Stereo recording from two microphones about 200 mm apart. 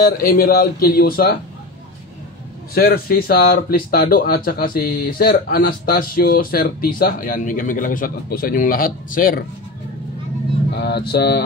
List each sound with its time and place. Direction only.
0.0 s speech: 45° left (ahead or behind)
2.7 s speech: 50° left (ahead or behind)
10.7 s speech: 55° left (ahead or behind)